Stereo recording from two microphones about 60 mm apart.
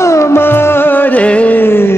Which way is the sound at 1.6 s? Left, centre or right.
Left.